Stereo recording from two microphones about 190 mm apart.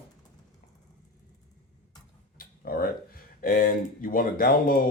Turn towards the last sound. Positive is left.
turn(degrees=50)  # may be behind; listen again after turning